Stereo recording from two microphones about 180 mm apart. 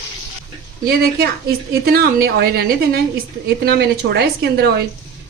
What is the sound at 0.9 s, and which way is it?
A woman's voice, 60° right (ahead or behind).